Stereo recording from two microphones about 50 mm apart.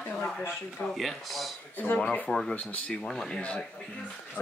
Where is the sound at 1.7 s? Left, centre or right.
Left.